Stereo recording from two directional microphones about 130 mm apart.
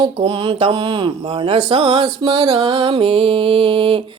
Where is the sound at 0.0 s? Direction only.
40° right (ahead or behind).